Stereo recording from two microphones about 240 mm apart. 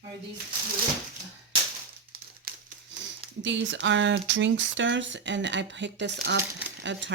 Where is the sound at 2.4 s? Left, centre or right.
Right.